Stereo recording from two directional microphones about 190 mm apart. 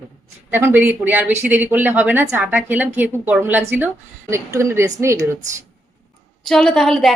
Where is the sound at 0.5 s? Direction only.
10° right (ahead or behind).